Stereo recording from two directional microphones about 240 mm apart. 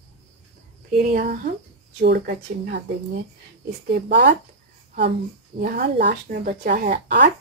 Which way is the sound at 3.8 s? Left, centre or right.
Right.